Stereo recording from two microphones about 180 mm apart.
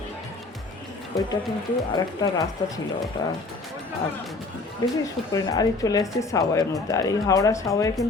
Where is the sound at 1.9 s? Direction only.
20° left (ahead or behind).